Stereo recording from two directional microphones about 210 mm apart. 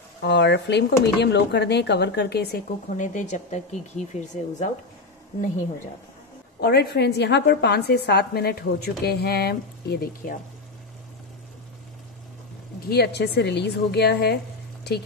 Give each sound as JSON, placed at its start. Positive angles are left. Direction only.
{"t": 0.2, "sound": "a woman's voice", "side_deg": 55}
{"t": 3.0, "sound": "speech", "side_deg": 35}
{"t": 6.6, "sound": "a woman's voice", "side_deg": 50}
{"t": 12.8, "sound": "a woman's voice", "side_deg": 50}